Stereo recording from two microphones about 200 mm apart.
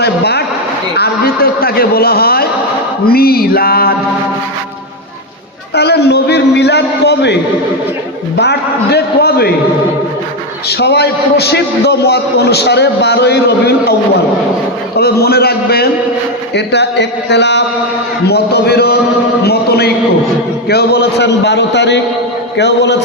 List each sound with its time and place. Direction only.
0.0 s a sound: 55° left (ahead or behind)
3.1 s a man's voice: 50° left (ahead or behind)
5.7 s a man's voice: 55° left (ahead or behind)
8.4 s a man's voice: 55° left (ahead or behind)
10.7 s a man's voice: 55° left (ahead or behind)
14.9 s a man's voice: 50° left (ahead or behind)